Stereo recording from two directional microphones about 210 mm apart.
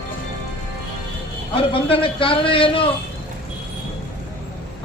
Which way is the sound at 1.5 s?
25° left (ahead or behind).